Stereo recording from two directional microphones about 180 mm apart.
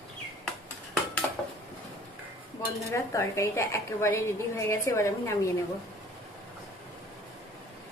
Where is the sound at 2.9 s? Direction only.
15° left (ahead or behind).